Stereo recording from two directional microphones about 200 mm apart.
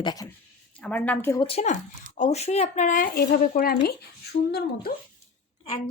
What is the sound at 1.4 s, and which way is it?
A woman's voice, 35° left (ahead or behind).